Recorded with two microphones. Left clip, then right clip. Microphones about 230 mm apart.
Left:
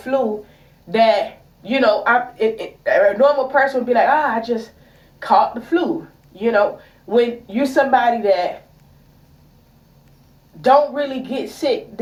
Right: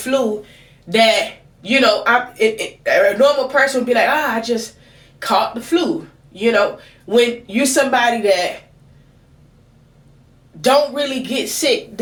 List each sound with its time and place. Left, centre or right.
0.9 s speech: right
10.6 s speech: right